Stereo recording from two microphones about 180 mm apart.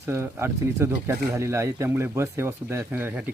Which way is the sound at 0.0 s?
15° right (ahead or behind).